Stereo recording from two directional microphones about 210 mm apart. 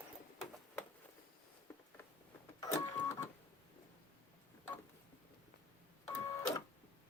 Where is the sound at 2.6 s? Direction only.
15° left (ahead or behind).